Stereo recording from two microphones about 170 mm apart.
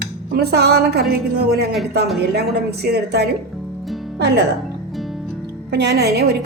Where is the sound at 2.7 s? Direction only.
70° right (ahead or behind).